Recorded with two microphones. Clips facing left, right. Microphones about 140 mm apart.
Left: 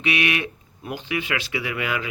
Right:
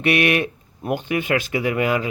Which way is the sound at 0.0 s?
50° right (ahead or behind).